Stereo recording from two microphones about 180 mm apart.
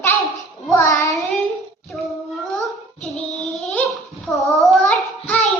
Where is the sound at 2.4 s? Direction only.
Centre (ahead or behind).